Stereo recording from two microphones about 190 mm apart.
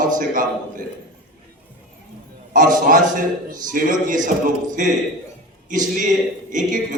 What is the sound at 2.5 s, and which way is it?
A man's voice, 45° right (ahead or behind).